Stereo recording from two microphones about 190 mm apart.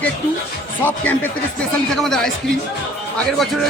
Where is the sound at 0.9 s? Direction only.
10° left (ahead or behind).